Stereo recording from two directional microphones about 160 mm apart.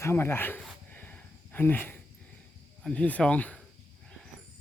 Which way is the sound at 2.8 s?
5° left (ahead or behind).